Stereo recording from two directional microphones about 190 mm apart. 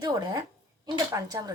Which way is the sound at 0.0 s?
20° right (ahead or behind).